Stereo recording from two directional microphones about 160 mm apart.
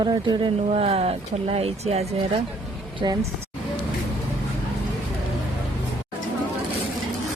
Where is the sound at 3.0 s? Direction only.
25° right (ahead or behind).